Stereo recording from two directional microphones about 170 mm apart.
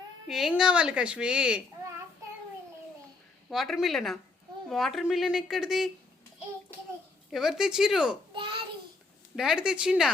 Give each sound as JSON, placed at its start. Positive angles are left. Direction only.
{"t": 0.3, "sound": "a woman's voice", "side_deg": 0}
{"t": 3.5, "sound": "a woman's voice", "side_deg": 0}
{"t": 7.3, "sound": "a woman's voice", "side_deg": -5}
{"t": 8.4, "sound": "child singing", "side_deg": -30}
{"t": 9.3, "sound": "a woman's voice", "side_deg": -5}